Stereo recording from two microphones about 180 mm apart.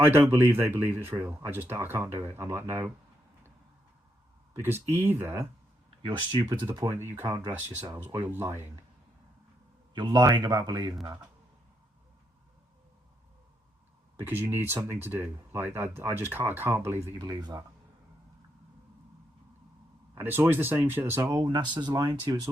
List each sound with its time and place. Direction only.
0.0 s speech: 10° right (ahead or behind)
4.6 s speech: 10° right (ahead or behind)
6.3 s a man's voice: 25° right (ahead or behind)
9.9 s a man's voice: 25° right (ahead or behind)
14.2 s speech: 10° right (ahead or behind)
20.1 s speech: 10° right (ahead or behind)